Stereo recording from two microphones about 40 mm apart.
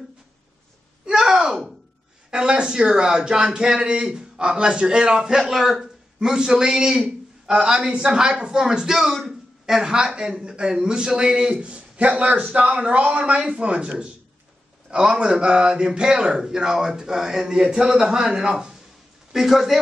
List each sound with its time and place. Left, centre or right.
1.0 s a sound: centre
2.3 s speech: right
5.4 s speech: centre
6.1 s a man's voice: centre
11.6 s a man's voice: right; by 19.8 s centre